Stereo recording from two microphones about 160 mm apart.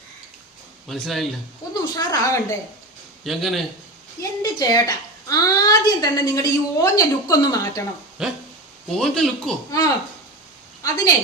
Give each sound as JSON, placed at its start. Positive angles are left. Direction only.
{"t": 0.9, "sound": "a man's voice", "side_deg": 0}
{"t": 2.0, "sound": "a woman's voice", "side_deg": 20}
{"t": 3.2, "sound": "a man's voice", "side_deg": 0}
{"t": 4.2, "sound": "a woman's voice", "side_deg": 25}
{"t": 8.2, "sound": "a man's voice", "side_deg": -5}
{"t": 9.6, "sound": "a woman's voice", "side_deg": 20}